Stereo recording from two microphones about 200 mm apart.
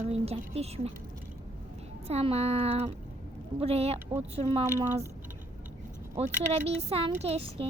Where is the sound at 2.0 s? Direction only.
30° right (ahead or behind).